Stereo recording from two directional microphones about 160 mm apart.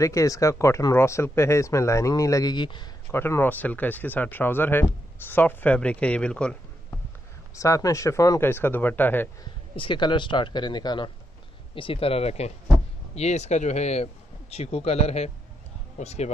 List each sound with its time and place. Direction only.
0.0 s speech: 20° left (ahead or behind)
3.1 s speech: 15° left (ahead or behind)
7.5 s speech: 20° left (ahead or behind)
9.4 s speech: 30° left (ahead or behind)